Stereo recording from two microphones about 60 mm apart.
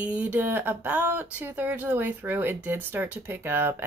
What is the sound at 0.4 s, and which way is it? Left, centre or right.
Speech, right.